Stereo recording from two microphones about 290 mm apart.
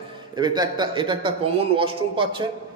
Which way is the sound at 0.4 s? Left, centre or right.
Centre.